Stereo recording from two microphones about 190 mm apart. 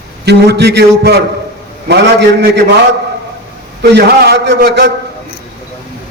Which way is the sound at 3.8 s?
60° right (ahead or behind).